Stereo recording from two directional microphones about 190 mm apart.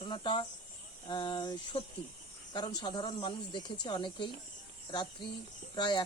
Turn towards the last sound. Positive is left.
turn(degrees=25)  # may be behind; listen again after turning